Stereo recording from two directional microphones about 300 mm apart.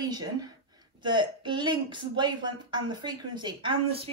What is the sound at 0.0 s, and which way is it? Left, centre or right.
A woman's voice, centre.